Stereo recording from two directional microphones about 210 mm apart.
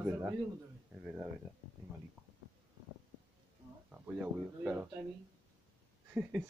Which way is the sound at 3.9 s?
10° right (ahead or behind).